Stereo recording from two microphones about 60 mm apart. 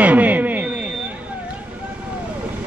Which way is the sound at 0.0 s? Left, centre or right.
Right.